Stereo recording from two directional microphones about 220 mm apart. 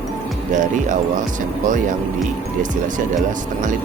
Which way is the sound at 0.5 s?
35° right (ahead or behind).